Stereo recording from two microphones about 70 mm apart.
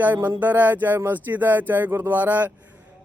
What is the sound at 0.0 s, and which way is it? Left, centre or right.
Speech, right.